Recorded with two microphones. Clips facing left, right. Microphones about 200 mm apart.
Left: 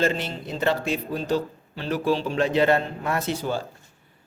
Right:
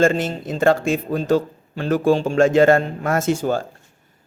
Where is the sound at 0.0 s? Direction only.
45° right (ahead or behind).